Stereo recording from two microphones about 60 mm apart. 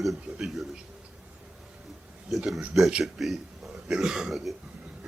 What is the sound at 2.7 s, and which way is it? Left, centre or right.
A man's voice, centre.